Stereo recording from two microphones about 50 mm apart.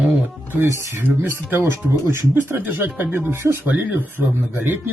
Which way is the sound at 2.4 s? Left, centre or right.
Right.